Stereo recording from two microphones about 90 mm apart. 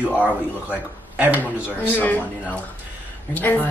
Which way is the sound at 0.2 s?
15° right (ahead or behind).